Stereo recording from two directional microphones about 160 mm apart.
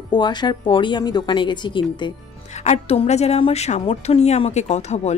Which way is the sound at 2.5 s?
45° left (ahead or behind).